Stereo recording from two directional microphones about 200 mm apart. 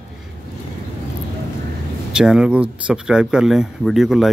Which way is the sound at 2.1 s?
5° right (ahead or behind).